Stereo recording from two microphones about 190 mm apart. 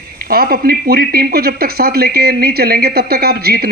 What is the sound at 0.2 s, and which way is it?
A man's voice, 55° right (ahead or behind).